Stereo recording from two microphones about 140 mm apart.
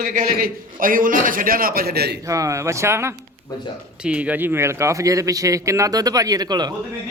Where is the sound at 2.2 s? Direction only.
20° right (ahead or behind).